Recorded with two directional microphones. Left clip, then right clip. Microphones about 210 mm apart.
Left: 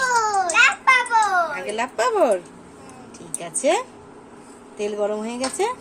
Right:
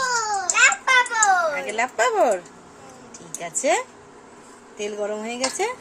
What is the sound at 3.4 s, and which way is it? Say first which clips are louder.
A woman's voice: left 1 dB; 5° left (ahead or behind).